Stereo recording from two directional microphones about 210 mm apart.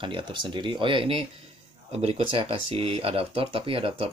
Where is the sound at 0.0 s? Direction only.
20° right (ahead or behind).